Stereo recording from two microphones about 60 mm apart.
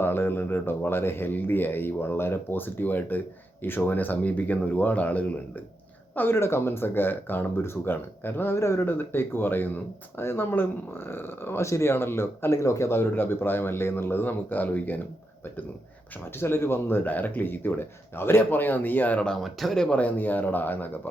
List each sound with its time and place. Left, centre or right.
0.0 s a man's voice: left
6.1 s a man's voice: left
8.5 s speech: left
8.9 s a man's voice: left
11.6 s a man's voice: left
16.4 s a man's voice: left
19.4 s speech: centre
19.8 s a man's voice: left